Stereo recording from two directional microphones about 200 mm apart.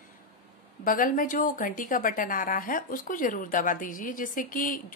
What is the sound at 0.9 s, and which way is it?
A woman's voice, 45° left (ahead or behind).